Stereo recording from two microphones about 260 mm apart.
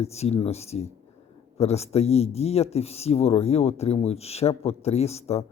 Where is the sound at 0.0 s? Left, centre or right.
Left.